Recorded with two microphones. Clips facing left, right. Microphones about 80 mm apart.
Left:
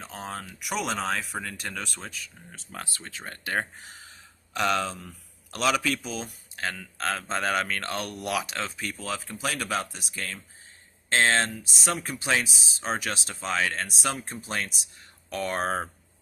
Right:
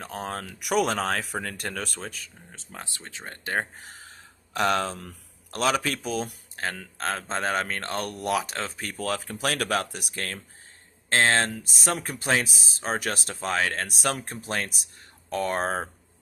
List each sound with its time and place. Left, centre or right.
0.0 s speech: right
2.5 s speech: right
3.8 s a sound: right
5.5 s speech: right
9.0 s speech: right
11.1 s speech: right
15.3 s speech: right